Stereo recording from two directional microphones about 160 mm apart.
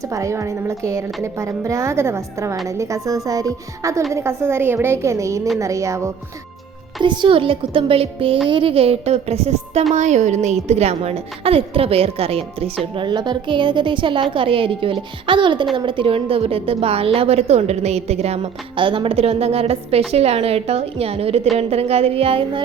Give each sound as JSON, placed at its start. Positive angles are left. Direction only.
{"t": 0.1, "sound": "a woman's voice", "side_deg": -20}
{"t": 7.0, "sound": "a woman's voice", "side_deg": -30}